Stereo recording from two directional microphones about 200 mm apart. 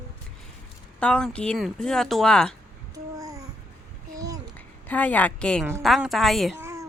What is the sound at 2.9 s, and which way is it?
Babbling, 15° right (ahead or behind).